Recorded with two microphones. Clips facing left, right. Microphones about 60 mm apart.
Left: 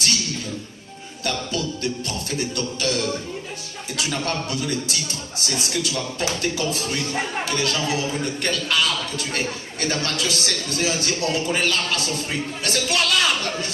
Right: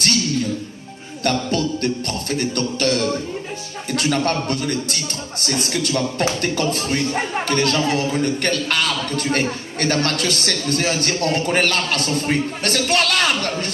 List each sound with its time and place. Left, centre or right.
1.2 s a man's voice: right